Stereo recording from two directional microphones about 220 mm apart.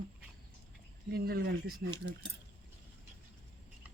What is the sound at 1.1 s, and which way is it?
Speech, 45° right (ahead or behind).